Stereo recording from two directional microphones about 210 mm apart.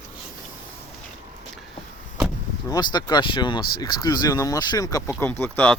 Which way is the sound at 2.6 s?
20° left (ahead or behind).